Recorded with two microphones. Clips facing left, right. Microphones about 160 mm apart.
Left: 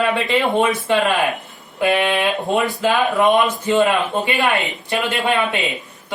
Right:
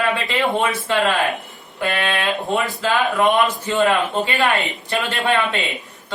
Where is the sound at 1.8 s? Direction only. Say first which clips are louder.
Left 5 dB; 15° left (ahead or behind).